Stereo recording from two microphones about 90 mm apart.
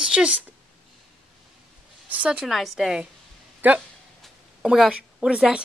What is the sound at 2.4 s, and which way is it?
Speech, centre (ahead or behind).